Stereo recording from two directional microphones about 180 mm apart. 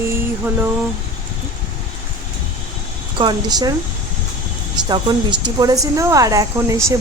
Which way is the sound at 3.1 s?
25° right (ahead or behind).